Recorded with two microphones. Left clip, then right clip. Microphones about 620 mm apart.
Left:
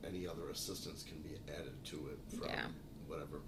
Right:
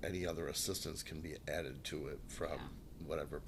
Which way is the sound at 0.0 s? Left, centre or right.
Right.